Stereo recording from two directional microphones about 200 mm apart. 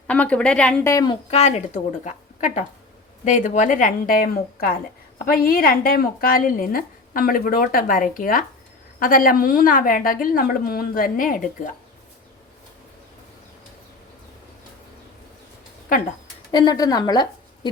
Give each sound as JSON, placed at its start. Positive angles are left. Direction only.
{"t": 0.1, "sound": "a woman's voice", "side_deg": 5}
{"t": 1.3, "sound": "a woman's voice", "side_deg": 35}
{"t": 16.5, "sound": "a woman's voice", "side_deg": 20}